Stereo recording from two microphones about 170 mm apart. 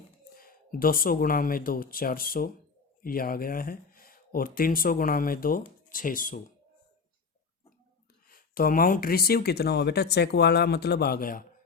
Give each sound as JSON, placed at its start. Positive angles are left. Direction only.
{"t": 0.3, "sound": "speech", "side_deg": 60}
{"t": 8.3, "sound": "speech", "side_deg": 60}